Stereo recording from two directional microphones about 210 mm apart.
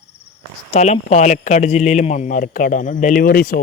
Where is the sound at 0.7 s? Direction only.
30° left (ahead or behind).